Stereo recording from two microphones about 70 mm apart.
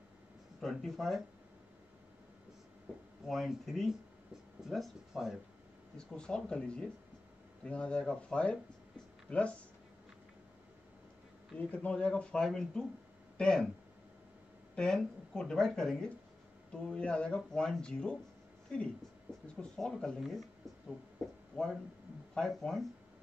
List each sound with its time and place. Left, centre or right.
0.6 s speech: centre
3.3 s speech: centre
6.1 s speech: centre
11.5 s speech: left
14.8 s speech: centre
19.4 s speech: centre